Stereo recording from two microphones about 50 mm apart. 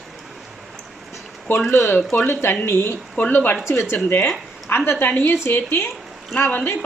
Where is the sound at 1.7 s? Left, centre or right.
Left.